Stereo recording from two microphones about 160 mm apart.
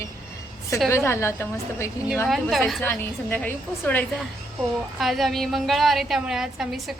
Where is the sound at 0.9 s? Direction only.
15° left (ahead or behind).